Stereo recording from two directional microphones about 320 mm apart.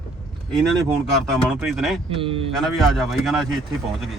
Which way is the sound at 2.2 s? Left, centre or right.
Centre.